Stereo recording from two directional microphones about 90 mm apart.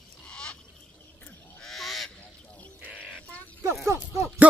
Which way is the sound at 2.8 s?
15° right (ahead or behind).